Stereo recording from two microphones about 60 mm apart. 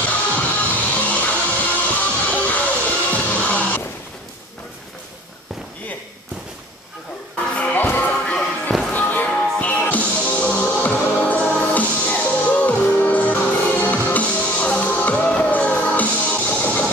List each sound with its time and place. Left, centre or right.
0.0 s music: left
7.5 s music: left